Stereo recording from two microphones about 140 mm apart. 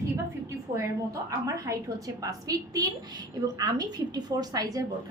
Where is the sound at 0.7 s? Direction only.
25° right (ahead or behind).